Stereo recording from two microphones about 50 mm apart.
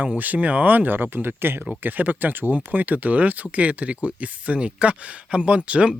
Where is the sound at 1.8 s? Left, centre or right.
Right.